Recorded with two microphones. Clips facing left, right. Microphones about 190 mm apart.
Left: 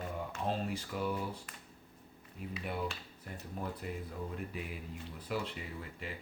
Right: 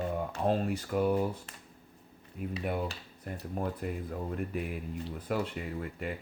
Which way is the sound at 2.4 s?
55° right (ahead or behind).